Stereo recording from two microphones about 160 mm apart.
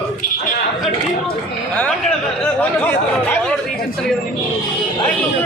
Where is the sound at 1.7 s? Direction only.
5° left (ahead or behind).